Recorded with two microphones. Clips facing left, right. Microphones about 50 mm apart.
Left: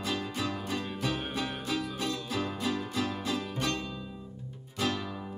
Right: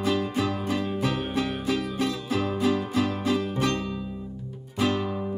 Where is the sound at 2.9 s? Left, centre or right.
Right.